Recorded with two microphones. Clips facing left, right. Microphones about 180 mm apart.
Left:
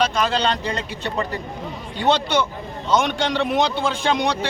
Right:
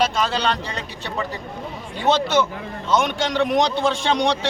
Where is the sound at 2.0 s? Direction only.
Centre (ahead or behind).